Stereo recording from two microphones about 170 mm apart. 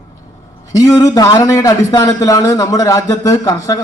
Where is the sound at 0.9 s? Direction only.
20° left (ahead or behind).